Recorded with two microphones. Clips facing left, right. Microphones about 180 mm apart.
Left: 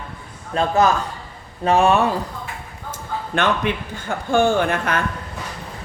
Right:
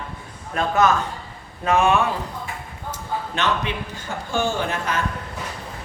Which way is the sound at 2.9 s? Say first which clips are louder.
Left 1 dB; 55° left (ahead or behind).